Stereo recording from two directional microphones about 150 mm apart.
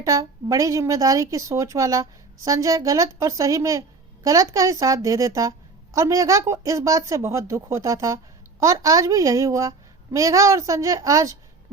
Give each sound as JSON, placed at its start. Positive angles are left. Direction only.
{"t": 0.0, "sound": "a woman's voice", "side_deg": -20}